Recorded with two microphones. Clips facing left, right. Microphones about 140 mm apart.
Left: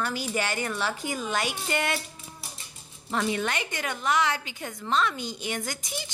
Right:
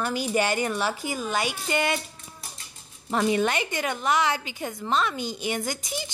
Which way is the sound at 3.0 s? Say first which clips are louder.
Right 5 dB; 20° right (ahead or behind).